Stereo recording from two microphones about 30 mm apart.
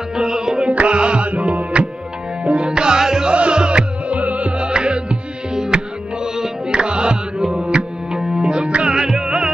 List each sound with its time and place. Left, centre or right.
0.1 s music: right
0.6 s music: right
1.3 s music: right
2.4 s music: right
3.3 s music: right
4.1 s music: right
4.5 s music: right
8.9 s music: right